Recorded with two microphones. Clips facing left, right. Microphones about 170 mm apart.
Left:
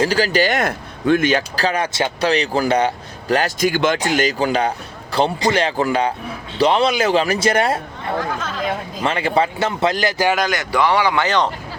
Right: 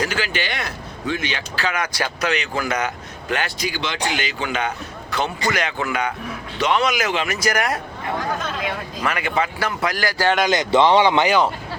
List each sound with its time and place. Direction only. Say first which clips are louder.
0.0 s speech: left 8 dB; 35° left (ahead or behind)
9.0 s speech: left 4 dB; 30° left (ahead or behind)
10.5 s speech: right 3 dB; 20° right (ahead or behind)
11.3 s speech: right 1 dB; 5° right (ahead or behind)